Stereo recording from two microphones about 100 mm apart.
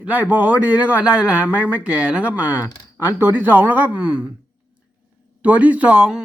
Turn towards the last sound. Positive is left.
turn(degrees=-10)  # may be behind; listen again after turning